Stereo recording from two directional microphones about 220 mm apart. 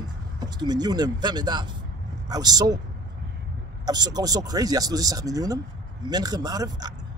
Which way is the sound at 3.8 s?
20° right (ahead or behind).